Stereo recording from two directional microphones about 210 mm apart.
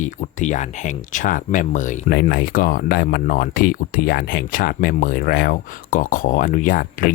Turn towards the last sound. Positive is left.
turn(degrees=40)  # may be behind; listen again after turning